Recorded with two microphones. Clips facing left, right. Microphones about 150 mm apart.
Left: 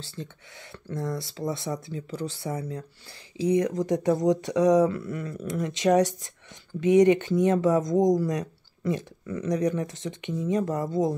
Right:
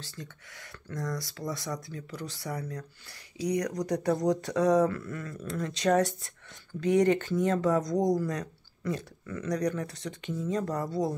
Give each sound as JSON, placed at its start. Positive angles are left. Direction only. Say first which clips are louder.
{"t": 0.1, "sound": "speech", "louder": "left 5 dB", "side_deg": 25}